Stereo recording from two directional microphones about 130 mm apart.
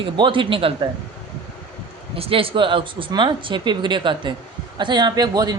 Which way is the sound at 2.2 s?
45° right (ahead or behind).